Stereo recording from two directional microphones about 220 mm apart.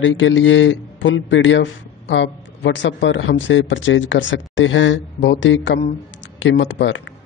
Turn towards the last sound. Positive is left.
turn(degrees=55)  # may be behind; listen again after turning